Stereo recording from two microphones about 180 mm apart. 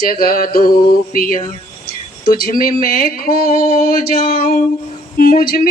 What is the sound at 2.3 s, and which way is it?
Mantra, 50° left (ahead or behind).